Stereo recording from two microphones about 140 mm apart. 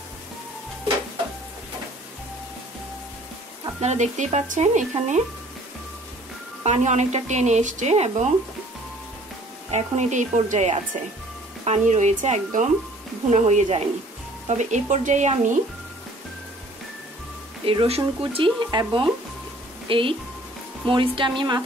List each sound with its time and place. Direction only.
3.8 s speech: 55° right (ahead or behind)
6.6 s speech: 55° right (ahead or behind)
9.7 s speech: 55° right (ahead or behind)
17.6 s speech: 45° right (ahead or behind)